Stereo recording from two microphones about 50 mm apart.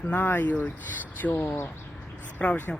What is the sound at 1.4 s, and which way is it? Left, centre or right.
Speech, left.